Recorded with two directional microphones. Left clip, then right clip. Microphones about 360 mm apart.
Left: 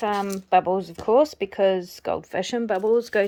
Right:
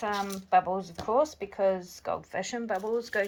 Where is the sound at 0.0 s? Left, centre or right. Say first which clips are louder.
Left 6 dB; centre.